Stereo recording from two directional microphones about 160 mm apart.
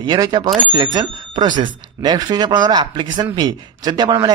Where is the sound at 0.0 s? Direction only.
25° right (ahead or behind).